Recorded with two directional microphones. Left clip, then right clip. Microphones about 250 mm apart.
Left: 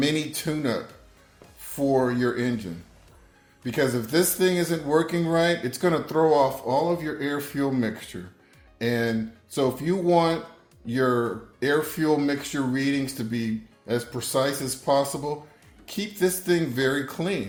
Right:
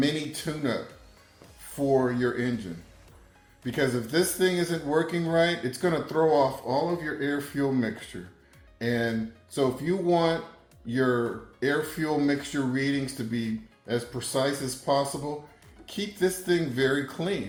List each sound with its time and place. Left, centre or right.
0.0 s speech: left
3.6 s speech: left